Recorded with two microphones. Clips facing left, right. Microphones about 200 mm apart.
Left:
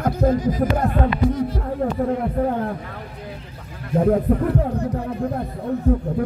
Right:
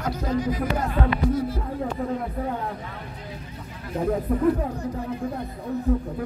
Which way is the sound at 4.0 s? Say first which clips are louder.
Left 3 dB; 55° left (ahead or behind).